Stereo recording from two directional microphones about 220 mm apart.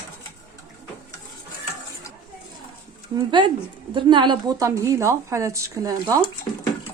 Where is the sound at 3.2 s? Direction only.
20° right (ahead or behind).